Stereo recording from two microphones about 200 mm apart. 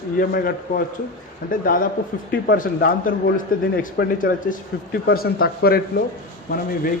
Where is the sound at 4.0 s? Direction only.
55° left (ahead or behind).